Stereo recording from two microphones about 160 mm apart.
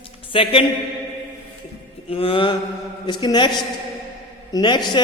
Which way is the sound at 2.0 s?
35° left (ahead or behind).